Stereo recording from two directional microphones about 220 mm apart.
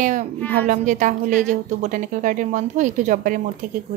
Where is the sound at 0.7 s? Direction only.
35° right (ahead or behind).